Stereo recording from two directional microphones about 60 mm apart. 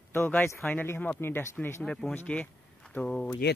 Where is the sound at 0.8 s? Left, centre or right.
Left.